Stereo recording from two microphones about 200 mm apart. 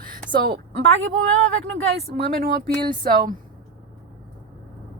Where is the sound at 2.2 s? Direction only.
50° right (ahead or behind).